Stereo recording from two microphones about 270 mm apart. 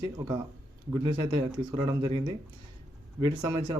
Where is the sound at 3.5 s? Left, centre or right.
Centre.